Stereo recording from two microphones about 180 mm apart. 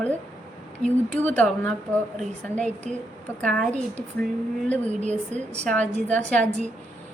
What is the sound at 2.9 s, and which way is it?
Speech, 45° right (ahead or behind).